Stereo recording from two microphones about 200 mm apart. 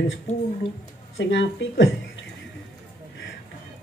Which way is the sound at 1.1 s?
65° left (ahead or behind).